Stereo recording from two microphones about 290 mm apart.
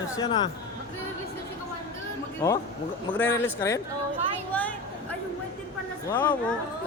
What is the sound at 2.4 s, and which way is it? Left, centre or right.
Speech, centre.